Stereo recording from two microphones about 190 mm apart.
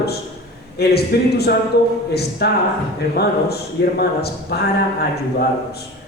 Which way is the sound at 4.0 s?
55° left (ahead or behind).